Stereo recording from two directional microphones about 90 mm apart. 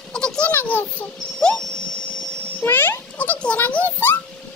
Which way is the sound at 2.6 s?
25° left (ahead or behind).